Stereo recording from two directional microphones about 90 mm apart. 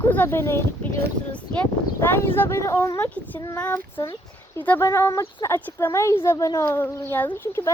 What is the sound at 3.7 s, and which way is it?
Speech, 35° left (ahead or behind).